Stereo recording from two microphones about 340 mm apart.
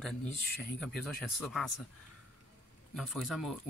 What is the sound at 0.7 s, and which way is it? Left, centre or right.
Speech, centre.